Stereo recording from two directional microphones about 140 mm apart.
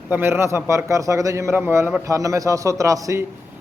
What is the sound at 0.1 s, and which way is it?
A man's voice, 15° right (ahead or behind).